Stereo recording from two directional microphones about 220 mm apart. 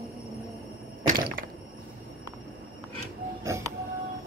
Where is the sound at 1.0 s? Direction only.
40° right (ahead or behind).